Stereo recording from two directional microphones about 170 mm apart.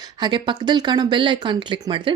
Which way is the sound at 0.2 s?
25° right (ahead or behind).